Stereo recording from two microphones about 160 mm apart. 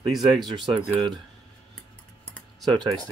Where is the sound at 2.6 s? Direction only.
25° right (ahead or behind).